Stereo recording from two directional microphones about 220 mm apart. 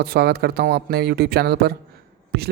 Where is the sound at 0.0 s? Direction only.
45° right (ahead or behind).